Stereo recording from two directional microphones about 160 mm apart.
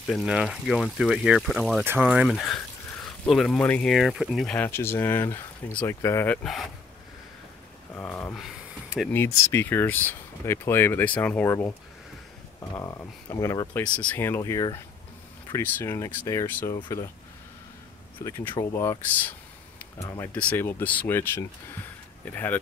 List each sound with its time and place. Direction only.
0.0 s speech: centre (ahead or behind)
4.6 s speech: 15° left (ahead or behind)
7.9 s speech: 15° left (ahead or behind)
8.4 s a sound: 5° right (ahead or behind)
9.1 s speech: 15° left (ahead or behind)
12.7 s speech: 15° left (ahead or behind)
16.7 s speech: 25° left (ahead or behind)
18.5 s speech: 20° left (ahead or behind)